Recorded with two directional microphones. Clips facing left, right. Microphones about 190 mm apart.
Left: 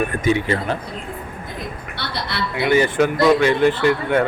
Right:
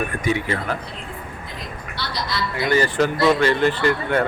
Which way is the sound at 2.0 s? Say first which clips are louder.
Even; 60° left (ahead or behind).